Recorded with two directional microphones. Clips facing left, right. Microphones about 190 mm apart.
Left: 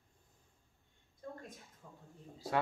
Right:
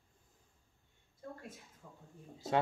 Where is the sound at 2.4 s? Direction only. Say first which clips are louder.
Right 2 dB; 25° right (ahead or behind).